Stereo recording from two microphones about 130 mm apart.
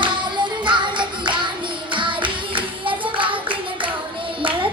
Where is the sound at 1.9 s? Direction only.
40° right (ahead or behind).